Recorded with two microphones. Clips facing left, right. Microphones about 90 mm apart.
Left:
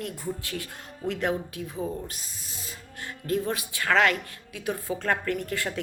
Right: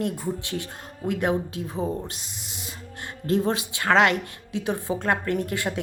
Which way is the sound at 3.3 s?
30° right (ahead or behind).